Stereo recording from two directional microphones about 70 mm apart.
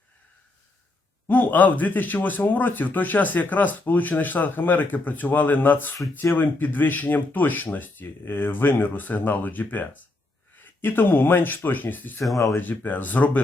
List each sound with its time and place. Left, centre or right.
1.3 s speech: left